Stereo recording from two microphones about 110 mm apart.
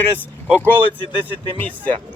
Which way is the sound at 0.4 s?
15° right (ahead or behind).